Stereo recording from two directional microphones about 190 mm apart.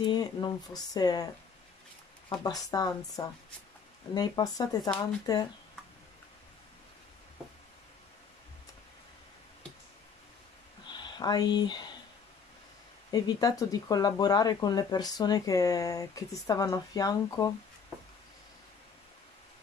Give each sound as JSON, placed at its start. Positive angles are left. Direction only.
{"t": 0.0, "sound": "speech", "side_deg": 25}
{"t": 10.9, "sound": "speech", "side_deg": 25}
{"t": 13.1, "sound": "speech", "side_deg": 20}